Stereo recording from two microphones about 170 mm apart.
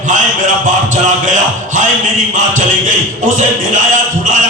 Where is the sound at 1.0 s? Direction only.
45° right (ahead or behind).